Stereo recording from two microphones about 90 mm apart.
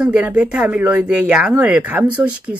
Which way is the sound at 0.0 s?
10° right (ahead or behind).